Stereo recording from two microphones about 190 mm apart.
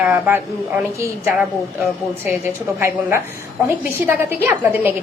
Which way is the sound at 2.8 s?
10° right (ahead or behind).